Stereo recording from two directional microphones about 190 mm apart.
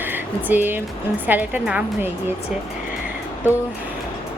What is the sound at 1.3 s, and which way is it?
Speech, 10° right (ahead or behind).